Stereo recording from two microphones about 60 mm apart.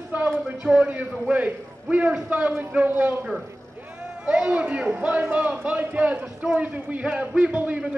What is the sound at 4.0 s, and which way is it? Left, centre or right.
A man's voice, centre.